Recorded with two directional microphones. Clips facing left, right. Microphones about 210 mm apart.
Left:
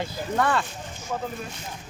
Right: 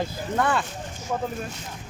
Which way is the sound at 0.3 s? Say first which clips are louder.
Even; centre (ahead or behind).